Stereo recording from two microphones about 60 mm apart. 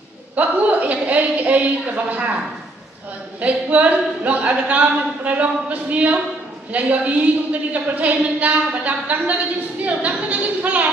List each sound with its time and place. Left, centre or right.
0.4 s speech: right
3.3 s speech: right